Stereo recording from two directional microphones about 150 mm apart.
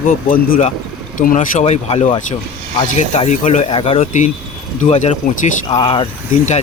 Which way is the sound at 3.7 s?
35° left (ahead or behind).